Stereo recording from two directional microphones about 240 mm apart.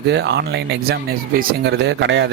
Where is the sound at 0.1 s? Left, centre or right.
Right.